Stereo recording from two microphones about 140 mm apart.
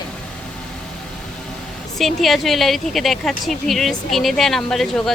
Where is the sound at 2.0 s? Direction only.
Centre (ahead or behind).